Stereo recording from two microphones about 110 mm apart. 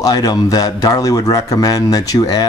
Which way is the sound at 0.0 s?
35° left (ahead or behind).